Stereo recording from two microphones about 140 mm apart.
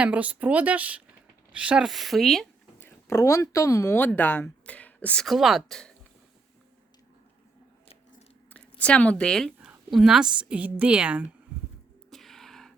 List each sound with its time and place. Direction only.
0.0 s speech: 10° right (ahead or behind)
2.8 s speech: 20° left (ahead or behind)
5.2 s speech: centre (ahead or behind)
8.8 s a woman's voice: 10° left (ahead or behind)
9.6 s a sound: 5° right (ahead or behind)
10.5 s speech: 10° right (ahead or behind)
12.1 s a sound: centre (ahead or behind)